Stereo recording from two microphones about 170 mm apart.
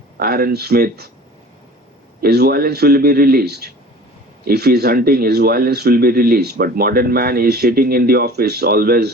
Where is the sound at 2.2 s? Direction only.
65° right (ahead or behind).